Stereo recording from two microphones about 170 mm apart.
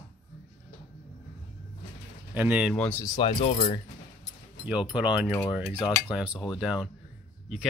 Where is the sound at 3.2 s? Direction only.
40° left (ahead or behind).